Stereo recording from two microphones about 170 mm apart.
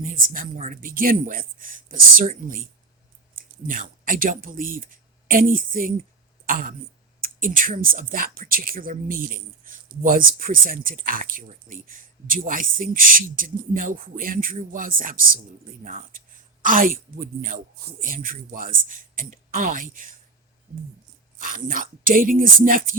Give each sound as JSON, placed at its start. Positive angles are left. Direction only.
{"t": 0.0, "sound": "speech", "side_deg": -55}
{"t": 21.3, "sound": "speech", "side_deg": -55}